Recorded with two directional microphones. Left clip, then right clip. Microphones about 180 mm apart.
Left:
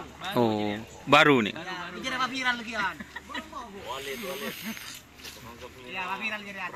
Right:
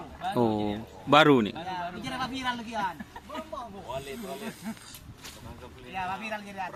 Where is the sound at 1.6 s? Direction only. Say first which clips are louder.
Even; 70° right (ahead or behind).